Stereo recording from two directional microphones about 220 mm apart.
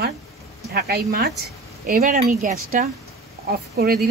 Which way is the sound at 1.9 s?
30° right (ahead or behind).